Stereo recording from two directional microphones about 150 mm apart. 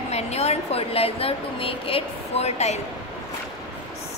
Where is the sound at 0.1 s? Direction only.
45° left (ahead or behind).